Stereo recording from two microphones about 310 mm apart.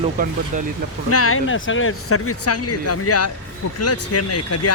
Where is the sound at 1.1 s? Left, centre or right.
Left.